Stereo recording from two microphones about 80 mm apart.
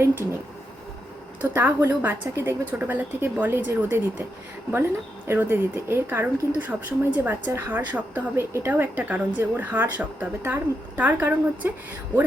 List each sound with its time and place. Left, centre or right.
1.4 s a woman's voice: right